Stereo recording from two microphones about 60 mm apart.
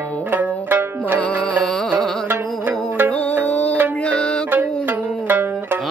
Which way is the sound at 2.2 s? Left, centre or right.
Right.